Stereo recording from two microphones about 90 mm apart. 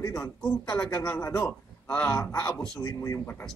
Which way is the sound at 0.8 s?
40° left (ahead or behind).